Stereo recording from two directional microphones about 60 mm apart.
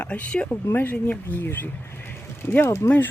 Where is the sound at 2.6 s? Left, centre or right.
Left.